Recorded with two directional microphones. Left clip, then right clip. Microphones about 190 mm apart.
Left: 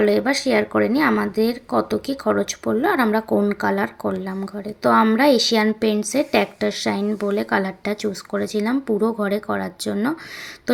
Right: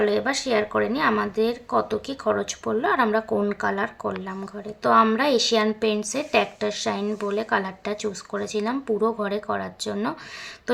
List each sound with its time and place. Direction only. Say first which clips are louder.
0.0 s a woman's voice: left 4 dB; 15° left (ahead or behind)